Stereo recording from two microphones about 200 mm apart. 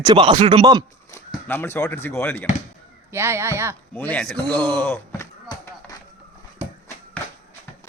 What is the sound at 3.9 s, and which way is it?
Speech, 10° left (ahead or behind).